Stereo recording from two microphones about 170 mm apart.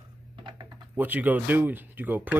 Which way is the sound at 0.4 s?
25° right (ahead or behind).